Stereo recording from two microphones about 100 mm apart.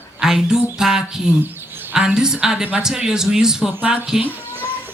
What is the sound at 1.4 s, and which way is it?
Bird, 20° right (ahead or behind).